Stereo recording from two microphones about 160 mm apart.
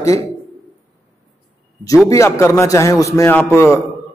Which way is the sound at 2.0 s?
20° left (ahead or behind).